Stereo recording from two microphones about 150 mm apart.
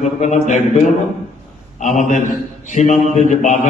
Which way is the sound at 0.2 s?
50° left (ahead or behind).